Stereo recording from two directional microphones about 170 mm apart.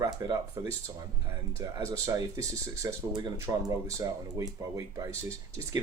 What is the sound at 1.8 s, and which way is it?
Speech, 20° right (ahead or behind).